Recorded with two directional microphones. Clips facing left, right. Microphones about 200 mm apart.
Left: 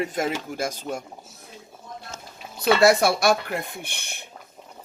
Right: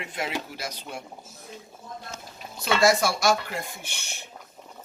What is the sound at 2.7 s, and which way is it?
Speech, 60° left (ahead or behind).